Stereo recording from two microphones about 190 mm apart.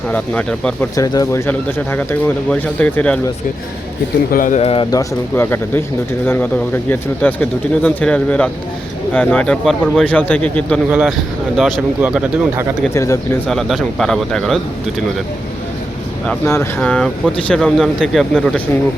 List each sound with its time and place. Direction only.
0.1 s speech: 10° left (ahead or behind)
0.9 s speech: 20° left (ahead or behind)
4.3 s speech: 45° left (ahead or behind); by 10.8 s 5° left (ahead or behind)
10.8 s speech: 5° right (ahead or behind)
12.9 s speech: 15° left (ahead or behind)
13.5 s speech: centre (ahead or behind)
16.5 s speech: 15° left (ahead or behind)